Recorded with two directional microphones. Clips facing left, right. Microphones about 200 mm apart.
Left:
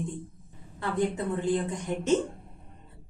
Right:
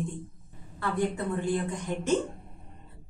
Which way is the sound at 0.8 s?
20° left (ahead or behind).